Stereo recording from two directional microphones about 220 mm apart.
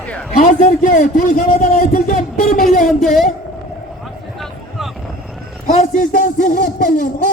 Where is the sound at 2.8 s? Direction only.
Centre (ahead or behind).